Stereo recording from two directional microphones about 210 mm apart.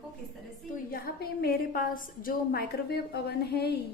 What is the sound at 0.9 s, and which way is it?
A woman's voice, 45° left (ahead or behind).